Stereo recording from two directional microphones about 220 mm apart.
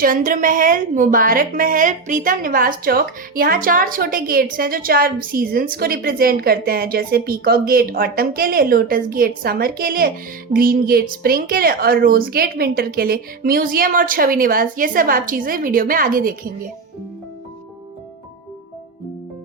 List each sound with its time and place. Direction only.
0.0 s a woman's voice: 40° right (ahead or behind)